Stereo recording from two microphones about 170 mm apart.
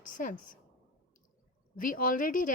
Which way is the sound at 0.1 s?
50° left (ahead or behind).